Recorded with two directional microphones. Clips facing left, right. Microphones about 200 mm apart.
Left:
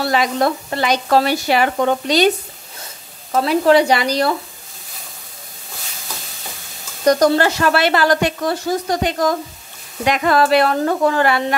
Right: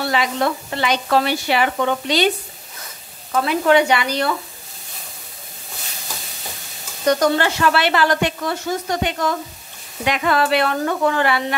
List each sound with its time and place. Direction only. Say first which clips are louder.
0.0 s speech: left 3 dB; 40° left (ahead or behind)
3.3 s speech: left 3 dB; 35° left (ahead or behind)
7.1 s speech: left 3 dB; 40° left (ahead or behind)